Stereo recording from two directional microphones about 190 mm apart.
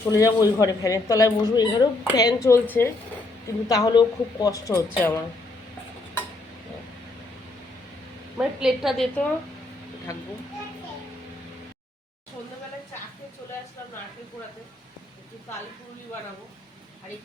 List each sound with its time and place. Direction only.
0.0 s a woman's voice: 15° left (ahead or behind)
8.4 s a woman's voice: 5° right (ahead or behind)